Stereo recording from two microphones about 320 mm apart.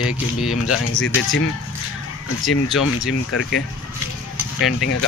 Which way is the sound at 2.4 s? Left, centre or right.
Centre.